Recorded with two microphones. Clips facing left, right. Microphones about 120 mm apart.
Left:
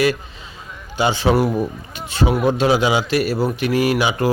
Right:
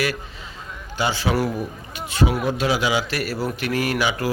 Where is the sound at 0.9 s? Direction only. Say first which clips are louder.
Left 5 dB; 20° left (ahead or behind).